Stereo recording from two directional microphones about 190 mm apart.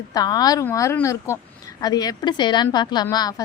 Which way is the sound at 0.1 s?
20° left (ahead or behind).